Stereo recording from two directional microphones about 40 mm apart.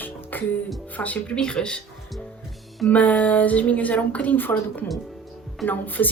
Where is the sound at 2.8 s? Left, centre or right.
Left.